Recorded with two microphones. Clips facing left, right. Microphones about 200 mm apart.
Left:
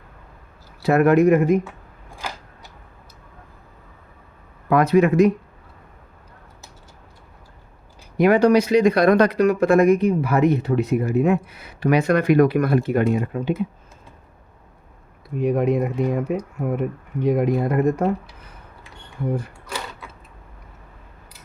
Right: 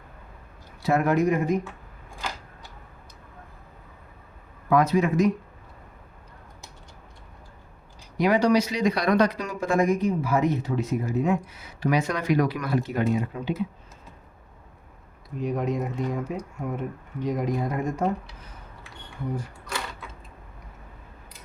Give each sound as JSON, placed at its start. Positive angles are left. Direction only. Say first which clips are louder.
{"t": 0.8, "sound": "speech", "louder": "left 7 dB", "side_deg": 65}
{"t": 4.7, "sound": "speech", "louder": "left 5 dB", "side_deg": 65}
{"t": 8.2, "sound": "speech", "louder": "left 6 dB", "side_deg": 55}
{"t": 15.4, "sound": "speech", "louder": "left 7 dB", "side_deg": 60}